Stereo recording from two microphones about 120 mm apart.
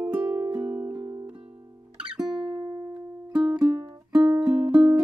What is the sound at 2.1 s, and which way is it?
Music, 5° right (ahead or behind).